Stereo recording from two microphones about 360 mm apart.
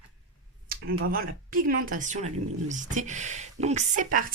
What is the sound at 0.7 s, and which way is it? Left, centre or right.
Speech, right.